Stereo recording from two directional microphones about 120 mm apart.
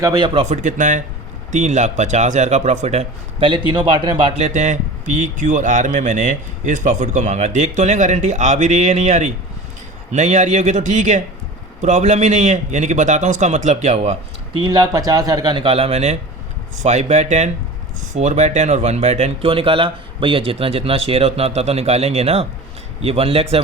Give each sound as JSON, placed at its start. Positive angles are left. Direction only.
{"t": 0.4, "sound": "a man's voice", "side_deg": -85}
{"t": 1.5, "sound": "a man's voice", "side_deg": -75}
{"t": 3.7, "sound": "a man's voice", "side_deg": -40}
{"t": 4.4, "sound": "a man's voice", "side_deg": -75}
{"t": 14.6, "sound": "a man's voice", "side_deg": -35}
{"t": 16.7, "sound": "a man's voice", "side_deg": -75}